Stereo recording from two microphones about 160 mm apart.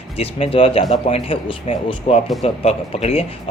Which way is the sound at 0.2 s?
40° left (ahead or behind).